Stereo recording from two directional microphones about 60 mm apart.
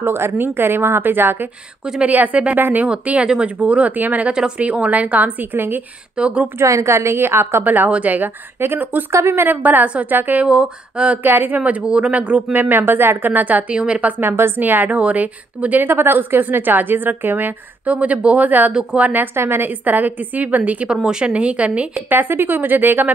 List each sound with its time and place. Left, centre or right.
0.0 s a woman's voice: right
1.9 s a woman's voice: right
6.1 s a woman's voice: right
6.6 s a woman's voice: right
7.6 s a woman's voice: right
9.1 s a woman's voice: right
9.5 s a woman's voice: right
10.4 s a woman's voice: centre
11.2 s a woman's voice: right
19.3 s a woman's voice: right
19.8 s a woman's voice: right
20.9 s a woman's voice: centre
22.1 s a woman's voice: right